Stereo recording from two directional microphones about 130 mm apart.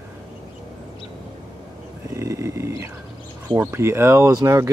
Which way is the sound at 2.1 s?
20° right (ahead or behind).